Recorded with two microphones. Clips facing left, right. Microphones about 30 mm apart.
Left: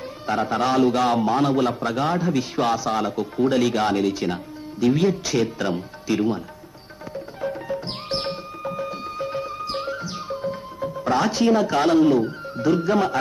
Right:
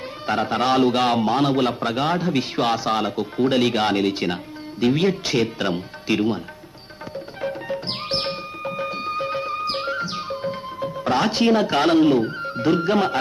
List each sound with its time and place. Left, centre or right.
0.3 s a man's voice: right
7.7 s music: right